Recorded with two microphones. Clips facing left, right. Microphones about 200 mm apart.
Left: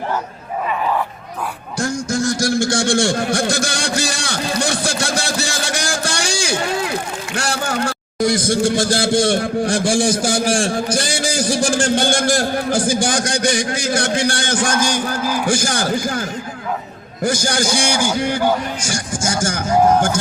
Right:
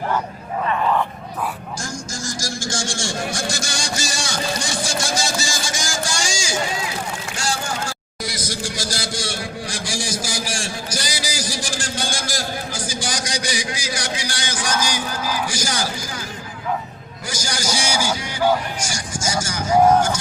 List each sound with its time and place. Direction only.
1.8 s a sound: 60° left (ahead or behind)
7.3 s a man's voice: 60° left (ahead or behind)
17.2 s a man's voice: 55° left (ahead or behind)